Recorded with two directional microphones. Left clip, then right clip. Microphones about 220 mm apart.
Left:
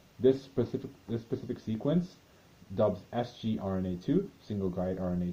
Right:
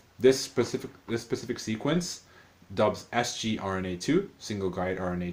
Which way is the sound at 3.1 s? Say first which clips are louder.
Right 6 dB; 40° right (ahead or behind).